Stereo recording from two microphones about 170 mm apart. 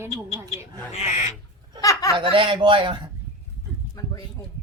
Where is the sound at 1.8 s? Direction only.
20° left (ahead or behind).